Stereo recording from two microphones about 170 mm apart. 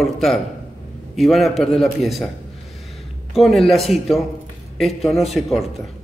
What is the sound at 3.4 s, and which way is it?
A man's voice, centre (ahead or behind).